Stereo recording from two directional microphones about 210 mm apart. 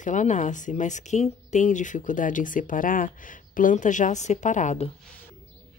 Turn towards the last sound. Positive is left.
turn(degrees=35)  # may be behind; listen again after turning